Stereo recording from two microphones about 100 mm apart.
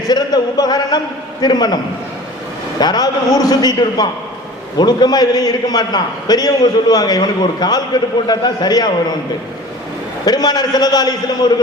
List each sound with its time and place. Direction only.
0.1 s a man's voice: 40° left (ahead or behind)
10.2 s a man's voice: 40° left (ahead or behind)